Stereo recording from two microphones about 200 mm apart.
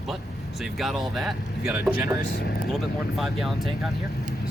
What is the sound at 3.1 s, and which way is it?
Speech, centre (ahead or behind).